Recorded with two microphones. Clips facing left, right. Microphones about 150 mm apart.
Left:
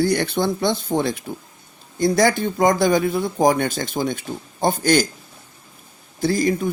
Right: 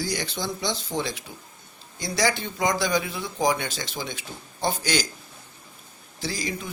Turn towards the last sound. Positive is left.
turn(degrees=50)  # may be behind; listen again after turning